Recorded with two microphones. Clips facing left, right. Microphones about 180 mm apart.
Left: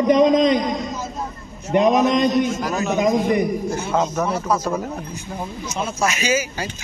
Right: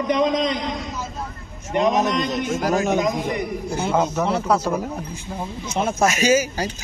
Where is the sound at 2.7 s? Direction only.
50° right (ahead or behind).